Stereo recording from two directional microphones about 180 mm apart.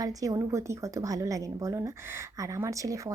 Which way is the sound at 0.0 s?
20° right (ahead or behind).